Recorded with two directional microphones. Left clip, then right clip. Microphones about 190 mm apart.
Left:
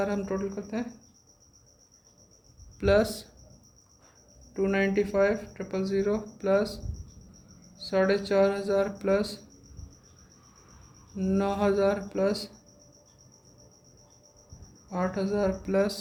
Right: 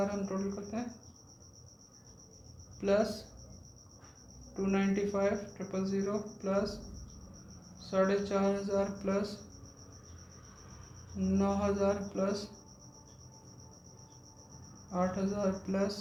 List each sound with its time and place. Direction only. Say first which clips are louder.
0.0 s speech: left 5 dB; 60° left (ahead or behind)
2.8 s speech: left 6 dB; 65° left (ahead or behind)
4.5 s speech: left 8 dB; 65° left (ahead or behind)
7.9 s speech: left 5 dB; 65° left (ahead or behind)
11.3 s speech: left 6 dB; 65° left (ahead or behind)
14.8 s speech: left 4 dB; 60° left (ahead or behind)